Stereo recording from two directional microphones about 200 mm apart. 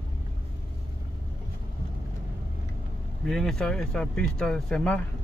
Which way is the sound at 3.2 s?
Centre (ahead or behind).